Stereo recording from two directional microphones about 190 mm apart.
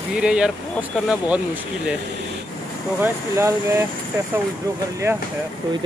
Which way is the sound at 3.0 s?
15° right (ahead or behind).